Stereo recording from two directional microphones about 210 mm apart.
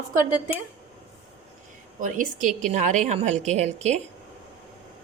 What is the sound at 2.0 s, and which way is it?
A woman's voice, 40° right (ahead or behind).